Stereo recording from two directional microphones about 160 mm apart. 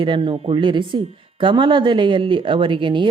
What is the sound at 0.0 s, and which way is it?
Speech, 30° right (ahead or behind).